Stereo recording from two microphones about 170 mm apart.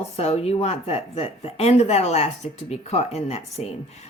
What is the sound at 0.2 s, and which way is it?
Speech, 40° left (ahead or behind).